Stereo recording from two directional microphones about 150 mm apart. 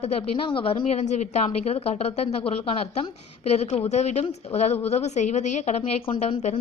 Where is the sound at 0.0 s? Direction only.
35° left (ahead or behind).